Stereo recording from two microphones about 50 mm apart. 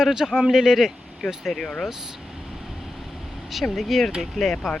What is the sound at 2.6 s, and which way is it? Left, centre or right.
Vehicle, centre.